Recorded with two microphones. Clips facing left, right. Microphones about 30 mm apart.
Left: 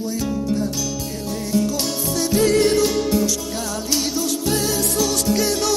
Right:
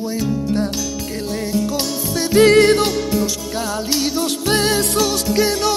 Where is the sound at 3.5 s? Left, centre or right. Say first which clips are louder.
Right 3 dB; right.